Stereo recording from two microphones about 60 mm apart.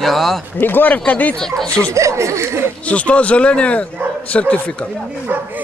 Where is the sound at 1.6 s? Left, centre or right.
Centre.